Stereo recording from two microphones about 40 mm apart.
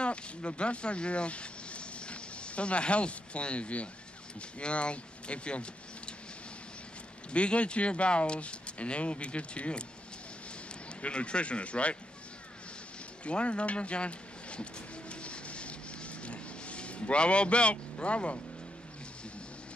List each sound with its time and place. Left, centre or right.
0.0 s speech: left
7.3 s speech: left
11.0 s speech: left
13.2 s a sound: left